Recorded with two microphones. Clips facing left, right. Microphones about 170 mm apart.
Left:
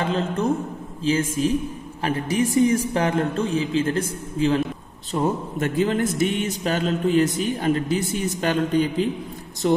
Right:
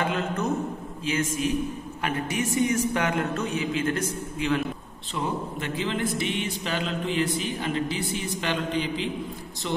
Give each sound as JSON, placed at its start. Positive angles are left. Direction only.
{"t": 0.0, "sound": "a man's voice", "side_deg": 30}
{"t": 5.1, "sound": "speech", "side_deg": 45}